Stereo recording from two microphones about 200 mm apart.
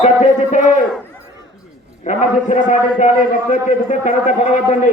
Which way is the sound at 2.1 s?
40° left (ahead or behind).